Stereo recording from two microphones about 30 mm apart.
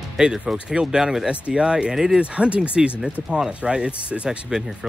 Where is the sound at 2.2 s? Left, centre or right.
Right.